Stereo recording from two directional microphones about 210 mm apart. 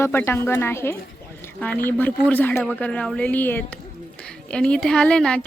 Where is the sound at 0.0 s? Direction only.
10° left (ahead or behind).